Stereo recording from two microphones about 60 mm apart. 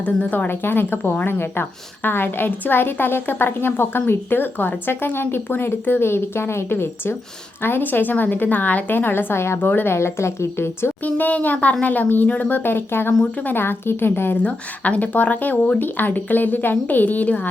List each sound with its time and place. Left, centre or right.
0.0 s speech: left
9.6 s a woman's voice: left
11.0 s speech: left
14.4 s speech: left